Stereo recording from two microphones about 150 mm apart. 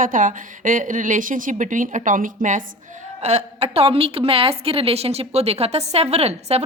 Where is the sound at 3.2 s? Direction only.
45° right (ahead or behind).